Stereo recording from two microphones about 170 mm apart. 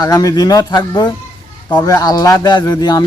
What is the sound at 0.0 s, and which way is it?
Speech, 20° left (ahead or behind).